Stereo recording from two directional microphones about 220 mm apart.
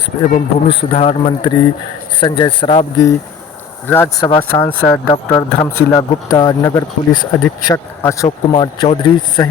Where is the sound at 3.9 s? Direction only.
10° left (ahead or behind).